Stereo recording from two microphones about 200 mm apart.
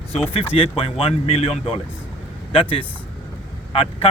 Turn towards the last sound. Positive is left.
turn(degrees=30)  # may be behind; listen again after turning